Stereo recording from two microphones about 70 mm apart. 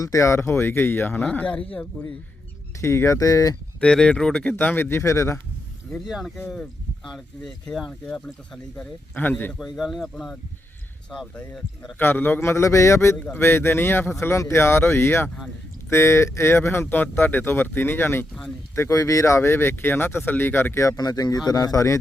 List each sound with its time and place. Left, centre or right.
0.0 s speech: left
2.8 s speech: left
3.8 s speech: centre
4.5 s speech: left
6.1 s speech: centre; by 9.5 s left
9.6 s speech: centre
11.3 s speech: centre
11.9 s speech: left
18.9 s speech: left
20.9 s speech: left